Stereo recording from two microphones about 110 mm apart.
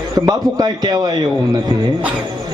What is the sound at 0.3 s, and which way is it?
A man's voice, 35° right (ahead or behind).